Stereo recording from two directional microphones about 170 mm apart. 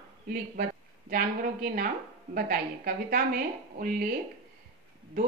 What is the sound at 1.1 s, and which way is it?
Speech, 55° right (ahead or behind).